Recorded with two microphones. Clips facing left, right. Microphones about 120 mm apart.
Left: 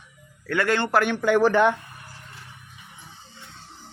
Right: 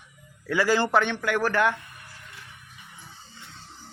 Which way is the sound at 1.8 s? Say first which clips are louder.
Left 3 dB; 35° left (ahead or behind).